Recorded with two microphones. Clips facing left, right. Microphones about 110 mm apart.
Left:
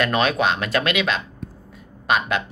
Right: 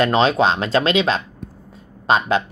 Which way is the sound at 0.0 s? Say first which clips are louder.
Right 4 dB; 25° right (ahead or behind).